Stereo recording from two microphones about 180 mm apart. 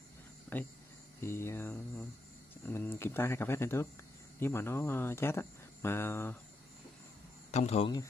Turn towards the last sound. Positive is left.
turn(degrees=40)  # may be behind; listen again after turning